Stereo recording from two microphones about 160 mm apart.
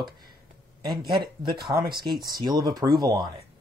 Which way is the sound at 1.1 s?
30° right (ahead or behind).